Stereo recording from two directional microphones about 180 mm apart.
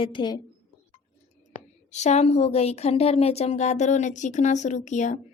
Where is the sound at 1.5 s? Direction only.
40° left (ahead or behind).